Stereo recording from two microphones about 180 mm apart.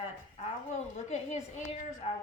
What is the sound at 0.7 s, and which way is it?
A woman's voice, 40° left (ahead or behind).